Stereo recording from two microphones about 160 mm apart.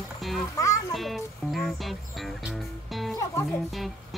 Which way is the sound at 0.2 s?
Centre (ahead or behind).